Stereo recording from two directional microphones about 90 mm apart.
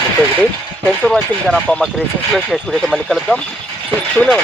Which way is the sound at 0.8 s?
5° left (ahead or behind).